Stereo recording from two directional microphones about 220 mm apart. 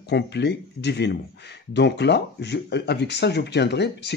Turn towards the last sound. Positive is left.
turn(degrees=50)  # may be behind; listen again after turning